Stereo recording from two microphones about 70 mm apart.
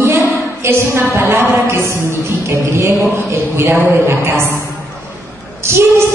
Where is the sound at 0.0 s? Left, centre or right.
Right.